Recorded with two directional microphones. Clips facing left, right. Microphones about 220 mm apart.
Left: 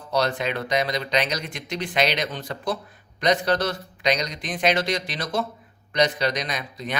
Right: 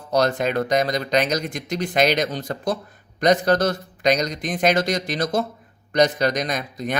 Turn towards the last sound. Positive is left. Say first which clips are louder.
# right 5 dB
turn(degrees=-45)  # may be behind; listen again after turning